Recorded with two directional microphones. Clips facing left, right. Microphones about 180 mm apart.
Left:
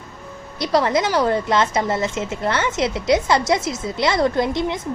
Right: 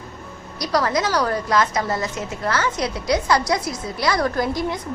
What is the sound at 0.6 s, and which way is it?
A woman's voice, 25° left (ahead or behind).